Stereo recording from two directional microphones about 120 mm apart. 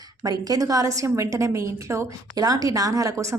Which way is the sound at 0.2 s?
30° right (ahead or behind).